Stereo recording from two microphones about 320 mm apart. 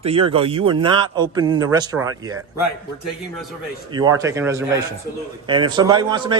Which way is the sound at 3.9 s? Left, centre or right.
Centre.